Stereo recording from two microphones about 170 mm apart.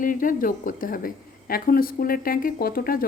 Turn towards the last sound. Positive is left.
turn(degrees=60)  # may be behind; listen again after turning